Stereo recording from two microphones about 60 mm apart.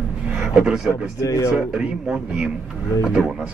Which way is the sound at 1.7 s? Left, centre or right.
Centre.